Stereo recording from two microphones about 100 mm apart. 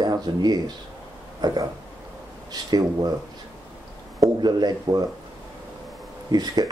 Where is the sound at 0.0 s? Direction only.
40° right (ahead or behind).